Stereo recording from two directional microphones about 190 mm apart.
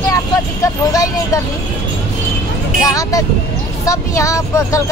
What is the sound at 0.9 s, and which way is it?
Vehicle, 20° left (ahead or behind).